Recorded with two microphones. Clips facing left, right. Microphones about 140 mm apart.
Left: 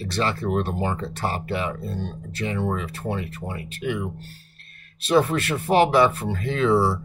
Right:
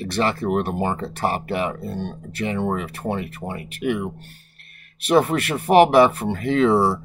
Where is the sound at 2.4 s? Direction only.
20° right (ahead or behind).